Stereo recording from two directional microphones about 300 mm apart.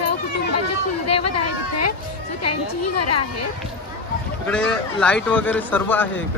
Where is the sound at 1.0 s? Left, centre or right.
Left.